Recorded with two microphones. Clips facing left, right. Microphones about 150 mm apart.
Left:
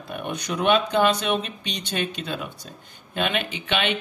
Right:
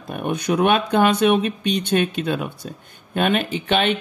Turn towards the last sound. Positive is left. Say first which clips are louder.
# right 6 dB
turn(degrees=-40)  # may be behind; listen again after turning